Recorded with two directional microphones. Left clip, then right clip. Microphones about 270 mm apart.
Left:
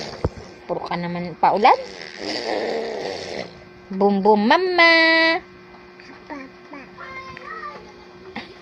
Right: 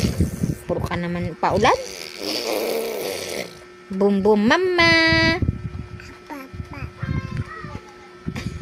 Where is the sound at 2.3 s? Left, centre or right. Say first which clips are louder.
Even; centre.